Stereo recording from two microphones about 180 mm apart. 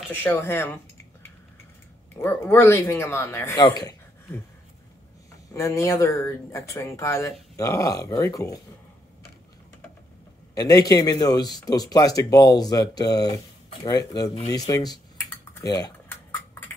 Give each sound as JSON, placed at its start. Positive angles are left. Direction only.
{"t": 0.1, "sound": "speech", "side_deg": 10}
{"t": 2.1, "sound": "speech", "side_deg": 10}
{"t": 5.5, "sound": "speech", "side_deg": 15}
{"t": 10.5, "sound": "speech", "side_deg": 20}
{"t": 15.6, "sound": "cutlery", "side_deg": 20}